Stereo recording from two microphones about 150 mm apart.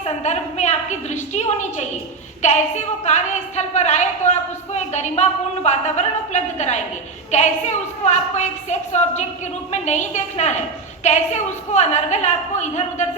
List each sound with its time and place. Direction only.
0.0 s a sound: 50° left (ahead or behind)
2.4 s a woman's voice: 50° left (ahead or behind)
9.8 s a woman's voice: 50° left (ahead or behind)